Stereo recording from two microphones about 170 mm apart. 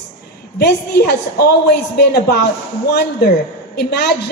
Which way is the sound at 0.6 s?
70° left (ahead or behind).